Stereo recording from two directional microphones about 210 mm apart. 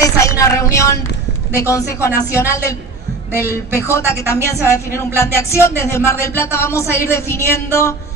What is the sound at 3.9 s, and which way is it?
Speech, 15° left (ahead or behind).